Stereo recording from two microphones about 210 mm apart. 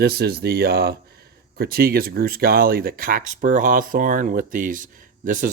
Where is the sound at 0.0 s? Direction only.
50° right (ahead or behind).